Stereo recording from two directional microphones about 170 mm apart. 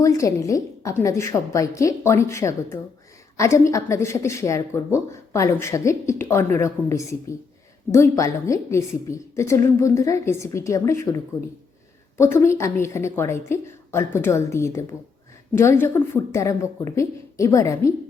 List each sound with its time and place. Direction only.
0.0 s a woman's voice: 20° left (ahead or behind)